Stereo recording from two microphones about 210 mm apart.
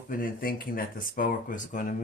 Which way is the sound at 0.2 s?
40° left (ahead or behind).